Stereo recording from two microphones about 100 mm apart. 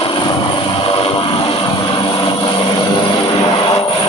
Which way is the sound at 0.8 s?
65° left (ahead or behind).